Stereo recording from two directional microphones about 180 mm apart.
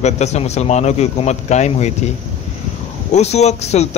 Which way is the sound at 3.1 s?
35° left (ahead or behind).